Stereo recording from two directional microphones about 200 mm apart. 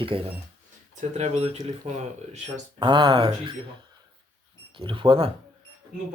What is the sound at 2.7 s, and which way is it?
Speech, 20° right (ahead or behind).